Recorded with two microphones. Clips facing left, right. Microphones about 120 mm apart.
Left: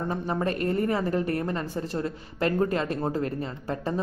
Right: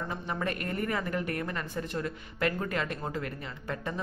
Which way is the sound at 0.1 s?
35° left (ahead or behind).